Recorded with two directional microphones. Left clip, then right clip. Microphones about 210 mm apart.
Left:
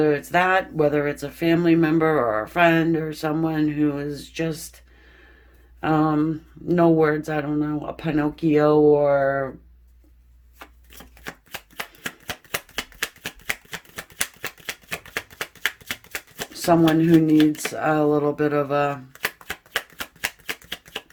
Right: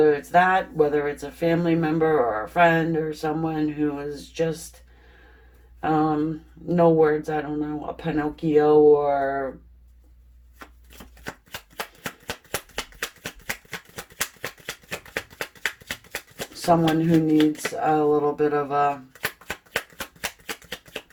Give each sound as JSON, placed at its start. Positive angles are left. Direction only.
{"t": 0.0, "sound": "speech", "side_deg": 40}
{"t": 5.8, "sound": "speech", "side_deg": 40}
{"t": 11.8, "sound": "shuffling cards", "side_deg": 35}
{"t": 16.6, "sound": "speech", "side_deg": 40}
{"t": 20.2, "sound": "shuffling cards", "side_deg": 35}